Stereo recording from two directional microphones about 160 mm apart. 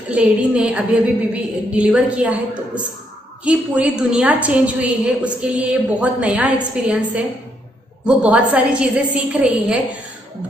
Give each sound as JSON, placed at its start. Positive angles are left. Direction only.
{"t": 0.1, "sound": "a woman's voice", "side_deg": -10}
{"t": 8.0, "sound": "a woman's voice", "side_deg": -10}